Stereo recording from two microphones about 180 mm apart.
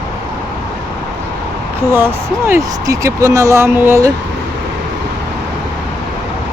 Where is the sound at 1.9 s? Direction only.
10° right (ahead or behind).